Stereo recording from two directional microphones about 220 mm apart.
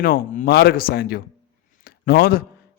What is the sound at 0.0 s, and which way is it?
Speech, 40° left (ahead or behind).